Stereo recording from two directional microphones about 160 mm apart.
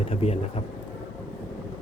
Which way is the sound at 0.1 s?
40° left (ahead or behind).